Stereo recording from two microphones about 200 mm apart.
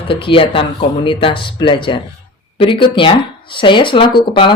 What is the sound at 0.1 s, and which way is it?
Speech, 25° left (ahead or behind).